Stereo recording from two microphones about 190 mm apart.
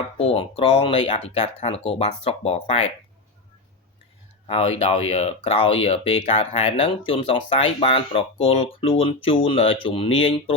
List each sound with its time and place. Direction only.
0.2 s speech: 30° left (ahead or behind)
4.4 s speech: 30° left (ahead or behind)